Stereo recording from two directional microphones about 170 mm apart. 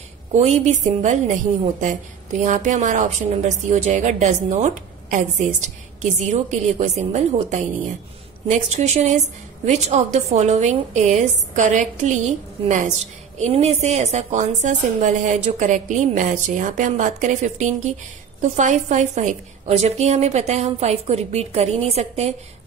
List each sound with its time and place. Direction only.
0.3 s a woman's voice: 40° right (ahead or behind)